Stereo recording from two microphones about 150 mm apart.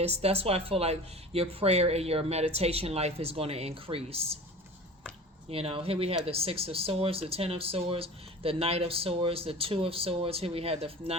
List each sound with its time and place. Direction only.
0.0 s speech: 45° right (ahead or behind)
5.5 s speech: 40° right (ahead or behind)